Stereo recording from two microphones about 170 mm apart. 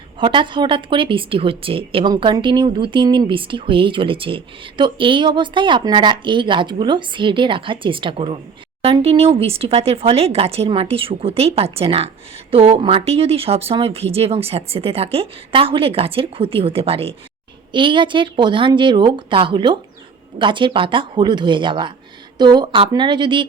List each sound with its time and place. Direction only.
0.2 s speech: 30° right (ahead or behind)